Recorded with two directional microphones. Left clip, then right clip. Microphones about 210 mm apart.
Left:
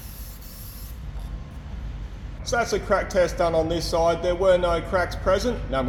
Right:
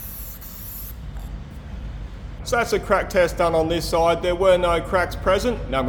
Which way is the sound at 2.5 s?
20° right (ahead or behind).